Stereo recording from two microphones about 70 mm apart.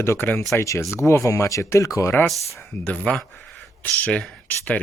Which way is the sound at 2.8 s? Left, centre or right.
Centre.